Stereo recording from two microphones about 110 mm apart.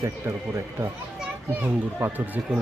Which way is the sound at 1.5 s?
15° right (ahead or behind).